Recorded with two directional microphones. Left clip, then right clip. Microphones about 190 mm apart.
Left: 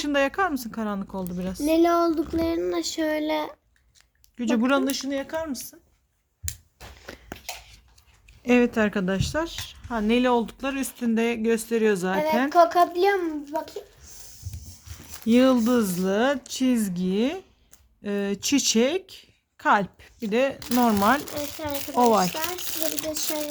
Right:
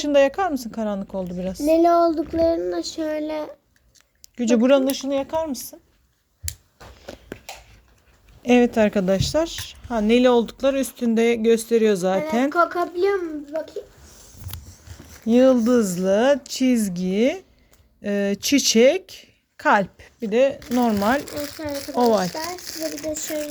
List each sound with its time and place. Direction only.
0.0 s speech: centre (ahead or behind)
1.6 s child singing: 15° left (ahead or behind)
4.4 s a woman's voice: 15° right (ahead or behind)
7.1 s a sound: centre (ahead or behind)
8.4 s a woman's voice: 5° right (ahead or behind)
12.5 s speech: 30° left (ahead or behind)
15.3 s child singing: 10° left (ahead or behind)
15.6 s a woman's voice: centre (ahead or behind)
20.2 s child singing: 10° left (ahead or behind)
20.6 s child singing: 20° left (ahead or behind)
21.9 s speech: 5° left (ahead or behind)
22.3 s speech: 40° left (ahead or behind)